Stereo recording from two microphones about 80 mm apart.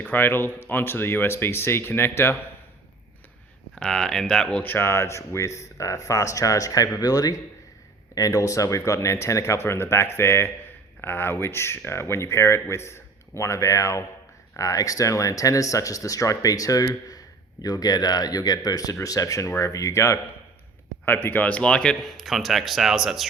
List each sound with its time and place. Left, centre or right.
0.0 s speech: left
3.8 s speech: centre
4.6 s speech: left
21.0 s speech: left; by 23.3 s centre